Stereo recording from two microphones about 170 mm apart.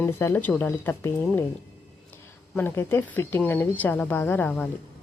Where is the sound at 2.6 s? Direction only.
15° left (ahead or behind).